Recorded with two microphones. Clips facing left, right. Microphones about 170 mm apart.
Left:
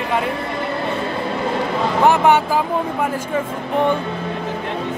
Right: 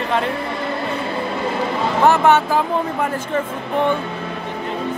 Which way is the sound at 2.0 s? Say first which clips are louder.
Even; 15° left (ahead or behind).